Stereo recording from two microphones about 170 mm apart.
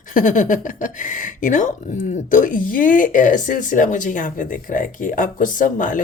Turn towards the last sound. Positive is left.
turn(degrees=50)  # may be behind; listen again after turning